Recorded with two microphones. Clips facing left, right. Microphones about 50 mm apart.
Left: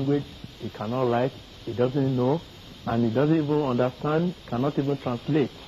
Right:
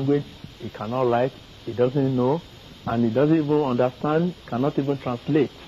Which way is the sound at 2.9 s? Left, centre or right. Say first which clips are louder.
Right 1 dB; centre.